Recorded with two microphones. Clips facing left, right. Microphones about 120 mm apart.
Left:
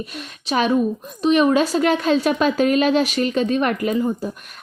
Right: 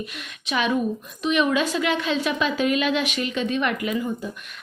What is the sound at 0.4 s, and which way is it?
A woman's voice, 35° left (ahead or behind).